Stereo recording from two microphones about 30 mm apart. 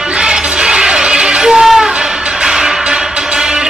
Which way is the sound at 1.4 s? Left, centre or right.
Right.